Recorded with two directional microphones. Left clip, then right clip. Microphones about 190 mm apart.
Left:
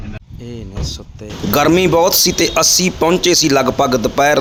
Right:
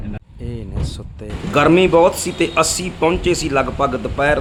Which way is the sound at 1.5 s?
35° left (ahead or behind).